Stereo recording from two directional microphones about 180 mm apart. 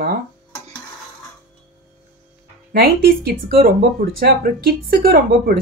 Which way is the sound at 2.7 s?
55° right (ahead or behind).